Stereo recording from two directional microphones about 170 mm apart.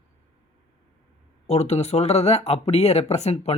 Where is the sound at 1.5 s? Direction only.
40° left (ahead or behind).